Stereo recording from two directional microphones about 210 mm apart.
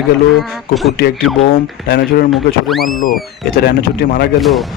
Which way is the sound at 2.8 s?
40° left (ahead or behind).